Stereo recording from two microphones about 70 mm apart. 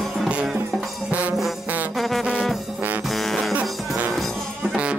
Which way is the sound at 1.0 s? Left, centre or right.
Right.